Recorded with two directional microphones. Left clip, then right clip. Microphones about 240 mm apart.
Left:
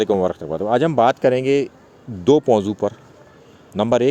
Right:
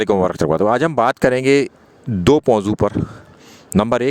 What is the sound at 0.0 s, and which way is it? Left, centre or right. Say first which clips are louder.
Speech: right 3 dB; right.